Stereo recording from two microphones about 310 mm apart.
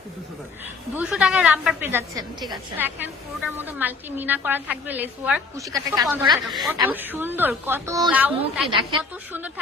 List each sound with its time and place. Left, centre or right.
0.9 s a woman's voice: centre
6.5 s a woman's voice: centre
8.7 s a woman's voice: centre